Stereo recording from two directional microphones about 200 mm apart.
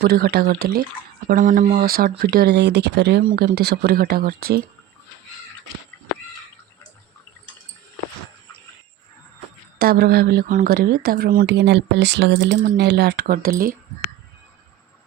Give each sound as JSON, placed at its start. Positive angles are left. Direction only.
{"t": 0.0, "sound": "speech", "side_deg": -50}
{"t": 9.7, "sound": "speech", "side_deg": -50}